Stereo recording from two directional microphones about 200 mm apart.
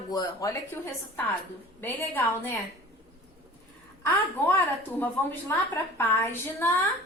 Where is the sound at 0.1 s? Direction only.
20° left (ahead or behind).